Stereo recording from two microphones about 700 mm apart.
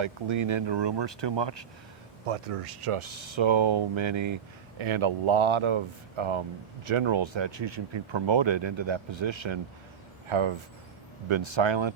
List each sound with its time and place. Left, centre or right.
0.0 s speech: right
2.2 s speech: right